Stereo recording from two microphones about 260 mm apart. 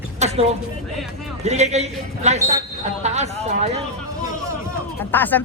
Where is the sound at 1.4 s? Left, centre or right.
Right.